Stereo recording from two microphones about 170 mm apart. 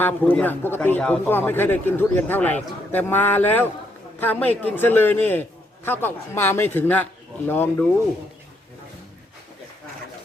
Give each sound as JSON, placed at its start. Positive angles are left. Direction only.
{"t": 0.0, "sound": "speech", "side_deg": 10}